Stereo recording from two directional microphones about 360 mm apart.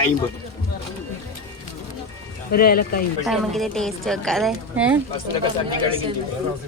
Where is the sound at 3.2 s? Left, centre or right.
Centre.